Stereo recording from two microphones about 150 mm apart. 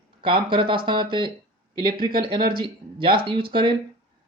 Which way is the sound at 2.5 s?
35° right (ahead or behind).